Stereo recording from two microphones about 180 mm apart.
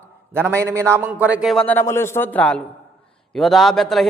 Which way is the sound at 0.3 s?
15° right (ahead or behind).